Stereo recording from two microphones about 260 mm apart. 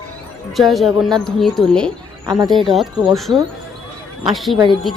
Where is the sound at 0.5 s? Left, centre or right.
Centre.